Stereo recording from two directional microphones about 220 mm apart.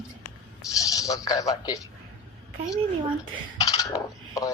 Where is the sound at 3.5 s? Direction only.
15° left (ahead or behind).